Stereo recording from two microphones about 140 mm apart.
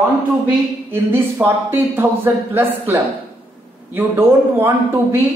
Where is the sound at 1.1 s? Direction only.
15° right (ahead or behind).